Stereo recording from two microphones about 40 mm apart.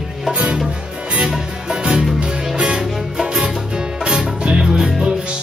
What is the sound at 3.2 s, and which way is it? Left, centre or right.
Music, right.